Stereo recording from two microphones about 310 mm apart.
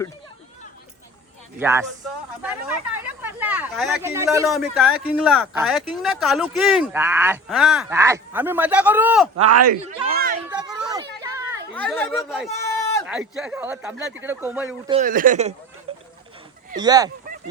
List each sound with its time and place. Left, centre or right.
1.5 s speech: centre
9.5 s speech: right
9.8 s speech: right
10.5 s a sound: centre
11.7 s speech: centre
14.8 s speech: right
15.9 s a sound: centre
16.7 s speech: centre